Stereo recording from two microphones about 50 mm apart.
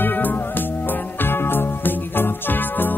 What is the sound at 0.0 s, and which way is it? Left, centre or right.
Music, left.